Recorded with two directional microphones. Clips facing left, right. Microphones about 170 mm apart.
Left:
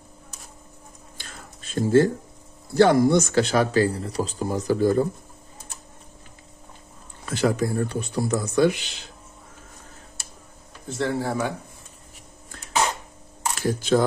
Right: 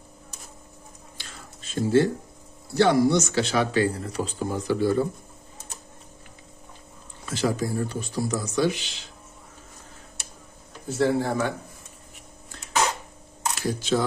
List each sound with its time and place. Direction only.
1.1 s a sound: 50° left (ahead or behind)
2.7 s speech: 50° left (ahead or behind)
7.2 s speech: 60° left (ahead or behind)
10.9 s speech: 5° right (ahead or behind)
13.6 s speech: 50° left (ahead or behind)